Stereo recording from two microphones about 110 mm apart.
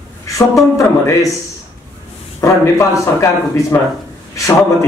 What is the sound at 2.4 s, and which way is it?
A man's voice, 30° left (ahead or behind).